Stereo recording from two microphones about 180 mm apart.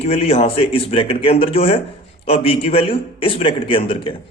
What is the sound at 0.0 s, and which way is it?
A man's voice, 35° left (ahead or behind).